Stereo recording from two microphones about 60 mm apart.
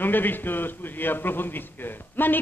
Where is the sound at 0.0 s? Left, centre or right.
Left.